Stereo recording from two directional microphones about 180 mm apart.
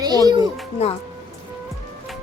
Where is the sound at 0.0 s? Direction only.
20° right (ahead or behind).